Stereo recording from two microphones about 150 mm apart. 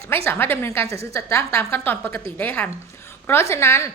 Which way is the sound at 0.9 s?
40° right (ahead or behind).